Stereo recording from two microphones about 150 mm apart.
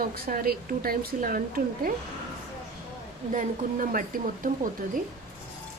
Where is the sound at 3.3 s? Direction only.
60° right (ahead or behind).